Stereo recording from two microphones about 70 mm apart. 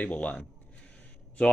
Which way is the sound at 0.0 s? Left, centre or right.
Centre.